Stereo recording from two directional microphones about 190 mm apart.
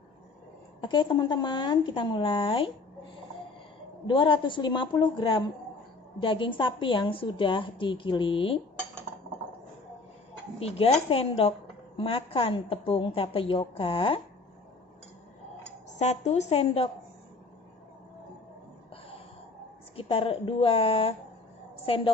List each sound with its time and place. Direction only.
0.8 s a woman's voice: 25° left (ahead or behind)
4.0 s a woman's voice: 25° left (ahead or behind)
10.6 s a woman's voice: 30° left (ahead or behind)
16.0 s a woman's voice: 35° left (ahead or behind)
20.0 s a woman's voice: 30° left (ahead or behind)